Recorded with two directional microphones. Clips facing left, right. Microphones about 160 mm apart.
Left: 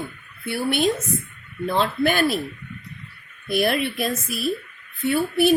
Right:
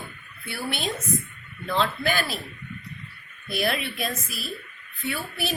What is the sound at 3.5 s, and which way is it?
Speech, 50° left (ahead or behind).